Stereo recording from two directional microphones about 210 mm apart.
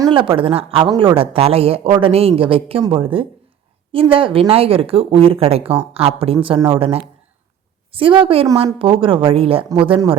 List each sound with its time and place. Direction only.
0.0 s speech: 25° right (ahead or behind)